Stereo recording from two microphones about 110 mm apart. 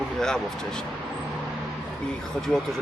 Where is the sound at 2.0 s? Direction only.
5° left (ahead or behind).